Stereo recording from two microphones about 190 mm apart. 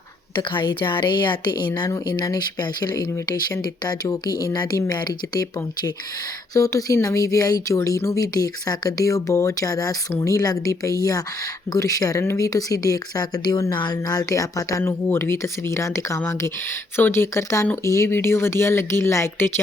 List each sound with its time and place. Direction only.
0.3 s a woman's voice: 25° left (ahead or behind)